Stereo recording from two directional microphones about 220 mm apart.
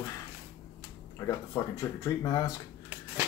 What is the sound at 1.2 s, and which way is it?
Speech, 15° left (ahead or behind).